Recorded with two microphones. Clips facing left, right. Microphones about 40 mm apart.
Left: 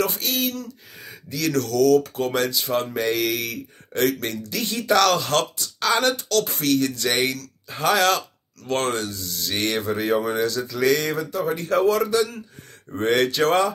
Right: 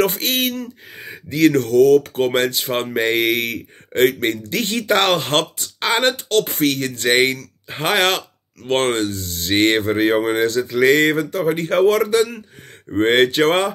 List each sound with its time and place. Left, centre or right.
0.0 s speech: right